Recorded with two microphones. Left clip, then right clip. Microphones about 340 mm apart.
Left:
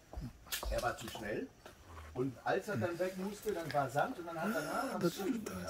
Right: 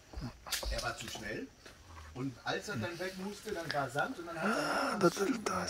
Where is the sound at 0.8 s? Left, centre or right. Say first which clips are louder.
Left 1 dB; left.